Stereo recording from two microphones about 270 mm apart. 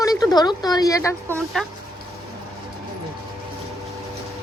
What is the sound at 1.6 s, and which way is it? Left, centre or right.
Speech, centre.